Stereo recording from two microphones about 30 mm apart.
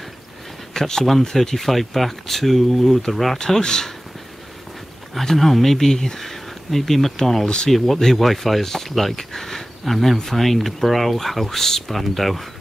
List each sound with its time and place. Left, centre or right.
0.7 s speech: centre
3.3 s speech: centre
5.2 s speech: centre
7.4 s speech: left
7.7 s speech: centre
9.1 s a sound: centre
10.1 s speech: centre